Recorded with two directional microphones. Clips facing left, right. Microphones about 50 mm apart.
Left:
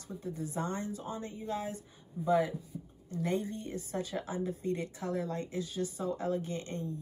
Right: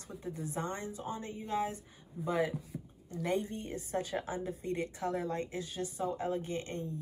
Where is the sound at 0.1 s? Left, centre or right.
Right.